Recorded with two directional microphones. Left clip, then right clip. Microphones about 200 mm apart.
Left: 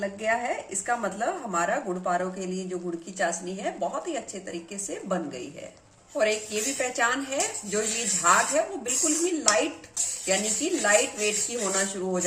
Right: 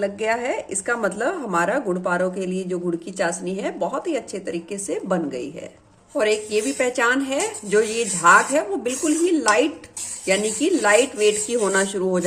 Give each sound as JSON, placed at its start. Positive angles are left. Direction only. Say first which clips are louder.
{"t": 0.0, "sound": "speech", "louder": "right 5 dB", "side_deg": -50}